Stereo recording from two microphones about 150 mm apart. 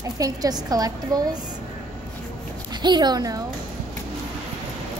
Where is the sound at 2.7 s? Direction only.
30° right (ahead or behind).